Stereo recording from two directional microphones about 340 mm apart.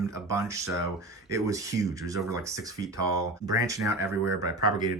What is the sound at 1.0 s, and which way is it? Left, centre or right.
Speech, centre.